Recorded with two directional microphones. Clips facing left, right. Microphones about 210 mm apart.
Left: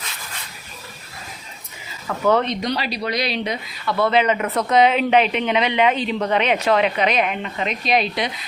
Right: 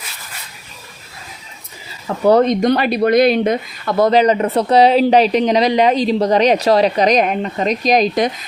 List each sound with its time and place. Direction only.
2.0 s speech: 35° right (ahead or behind)